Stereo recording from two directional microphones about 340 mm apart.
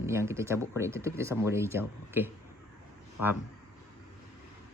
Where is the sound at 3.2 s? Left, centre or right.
Left.